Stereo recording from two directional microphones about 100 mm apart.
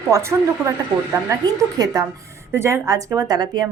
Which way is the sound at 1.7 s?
40° right (ahead or behind).